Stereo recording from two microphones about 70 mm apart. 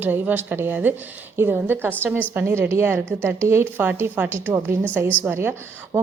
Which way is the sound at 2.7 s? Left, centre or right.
Right.